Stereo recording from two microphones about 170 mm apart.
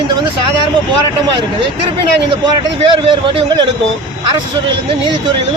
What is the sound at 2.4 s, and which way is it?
A man's voice, 30° right (ahead or behind).